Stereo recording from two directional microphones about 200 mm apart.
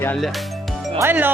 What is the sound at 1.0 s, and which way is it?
Speech, 10° right (ahead or behind).